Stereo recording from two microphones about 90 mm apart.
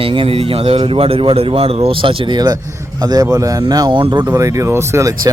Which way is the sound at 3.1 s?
45° right (ahead or behind).